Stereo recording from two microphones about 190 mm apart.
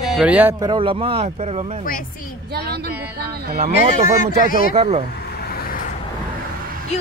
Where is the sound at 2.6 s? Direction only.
55° right (ahead or behind).